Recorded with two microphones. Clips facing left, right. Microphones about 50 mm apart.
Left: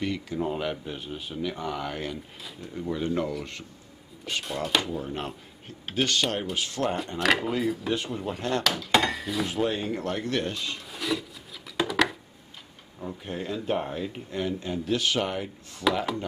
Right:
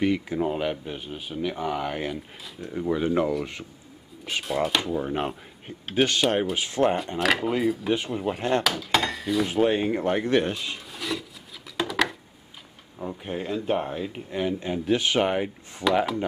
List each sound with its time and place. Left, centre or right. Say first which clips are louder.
0.0 s speech: right 5 dB; centre
4.9 s speech: right 5 dB; centre
7.2 s speech: right 1 dB; centre
8.6 s speech: even; centre
9.5 s speech: right 6 dB; right
10.9 s filing: left 3 dB; centre
11.7 s a sound: left 1 dB; centre
13.0 s speech: right 3 dB; centre